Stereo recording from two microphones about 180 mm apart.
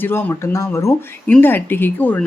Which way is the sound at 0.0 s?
10° left (ahead or behind).